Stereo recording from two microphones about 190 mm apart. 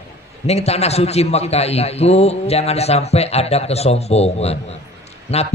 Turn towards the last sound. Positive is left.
turn(degrees=35)  # may be behind; listen again after turning